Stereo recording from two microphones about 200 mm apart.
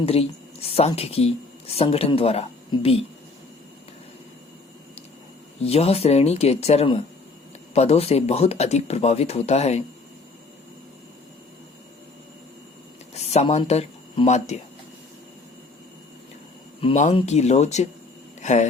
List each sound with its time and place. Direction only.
0.0 s speech: 30° left (ahead or behind)
5.6 s speech: 30° left (ahead or behind)
13.1 s speech: 30° left (ahead or behind)
16.8 s speech: 35° left (ahead or behind)
18.3 s a sound: 35° left (ahead or behind)